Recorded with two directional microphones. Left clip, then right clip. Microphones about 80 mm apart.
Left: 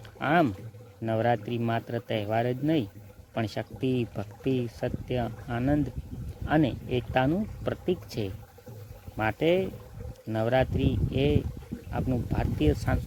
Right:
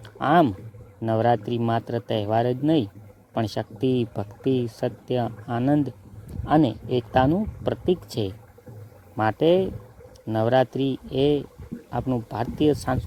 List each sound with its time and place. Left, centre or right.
0.2 s speech: right